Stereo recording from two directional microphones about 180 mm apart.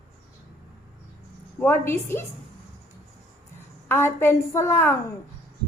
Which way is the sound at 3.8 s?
10° left (ahead or behind).